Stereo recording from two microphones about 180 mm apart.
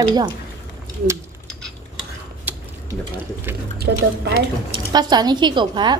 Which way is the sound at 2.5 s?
10° right (ahead or behind).